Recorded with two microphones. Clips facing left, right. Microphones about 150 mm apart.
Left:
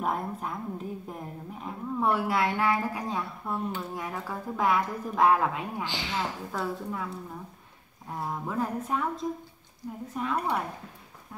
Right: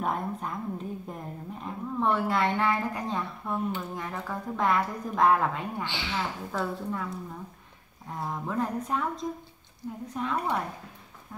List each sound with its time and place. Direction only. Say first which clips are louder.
0.0 s a woman's voice: even; centre (ahead or behind)
5.9 s speech: even; 40° left (ahead or behind)
6.5 s a woman's voice: right 1 dB; 5° left (ahead or behind)
8.2 s a woman's voice: even; 5° left (ahead or behind)